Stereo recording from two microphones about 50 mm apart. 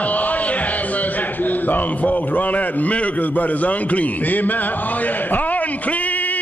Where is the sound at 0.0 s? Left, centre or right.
Left.